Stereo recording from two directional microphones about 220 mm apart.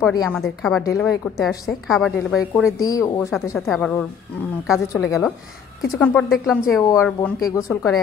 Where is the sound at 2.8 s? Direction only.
15° left (ahead or behind).